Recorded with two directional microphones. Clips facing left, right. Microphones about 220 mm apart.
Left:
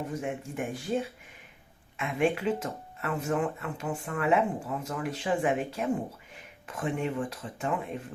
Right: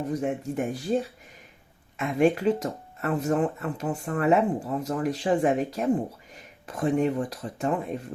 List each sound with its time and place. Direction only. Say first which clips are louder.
0.1 s speech: right 6 dB; 40° right (ahead or behind)
2.0 s speech: right 5 dB; 40° right (ahead or behind)